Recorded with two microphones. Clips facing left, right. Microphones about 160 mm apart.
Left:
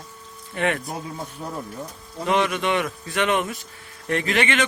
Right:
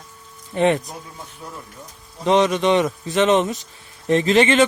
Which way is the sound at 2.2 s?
25° right (ahead or behind).